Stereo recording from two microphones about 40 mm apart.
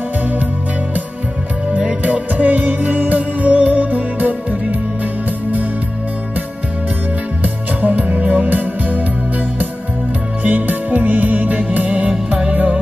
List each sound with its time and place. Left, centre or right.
2.0 s music: right
7.4 s music: right
10.4 s music: right